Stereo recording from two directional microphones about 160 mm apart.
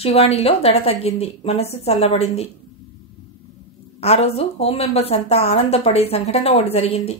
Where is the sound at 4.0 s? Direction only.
40° left (ahead or behind).